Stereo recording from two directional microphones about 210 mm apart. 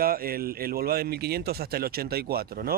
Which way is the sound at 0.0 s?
45° right (ahead or behind).